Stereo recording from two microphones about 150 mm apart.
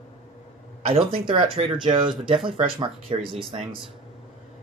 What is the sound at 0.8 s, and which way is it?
Speech, 40° right (ahead or behind).